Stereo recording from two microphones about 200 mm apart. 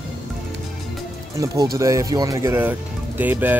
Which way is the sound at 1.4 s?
15° right (ahead or behind).